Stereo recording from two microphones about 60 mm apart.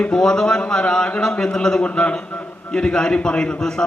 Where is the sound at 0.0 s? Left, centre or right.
Centre.